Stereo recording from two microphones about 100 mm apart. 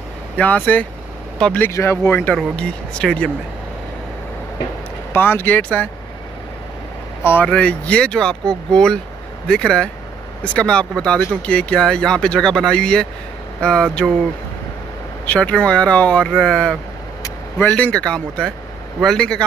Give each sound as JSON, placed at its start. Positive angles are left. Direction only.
{"t": 0.4, "sound": "speech", "side_deg": 15}
{"t": 1.7, "sound": "speech", "side_deg": 25}
{"t": 5.1, "sound": "speech", "side_deg": 20}
{"t": 7.4, "sound": "speech", "side_deg": 10}
{"t": 15.2, "sound": "speech", "side_deg": 10}
{"t": 17.6, "sound": "speech", "side_deg": 15}